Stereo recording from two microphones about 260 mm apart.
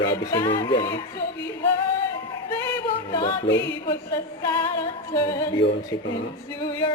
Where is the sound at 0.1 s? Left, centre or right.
Centre.